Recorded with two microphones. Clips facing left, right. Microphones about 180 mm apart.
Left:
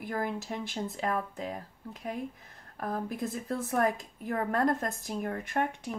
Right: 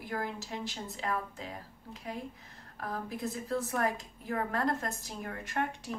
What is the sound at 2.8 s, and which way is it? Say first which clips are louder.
A woman's voice: left 4 dB; 50° left (ahead or behind).